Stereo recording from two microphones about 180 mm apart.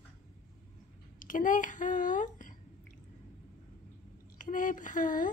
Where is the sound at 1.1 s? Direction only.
50° left (ahead or behind).